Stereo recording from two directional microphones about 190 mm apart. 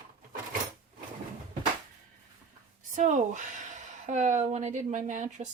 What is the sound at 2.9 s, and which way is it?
Speech, 40° right (ahead or behind).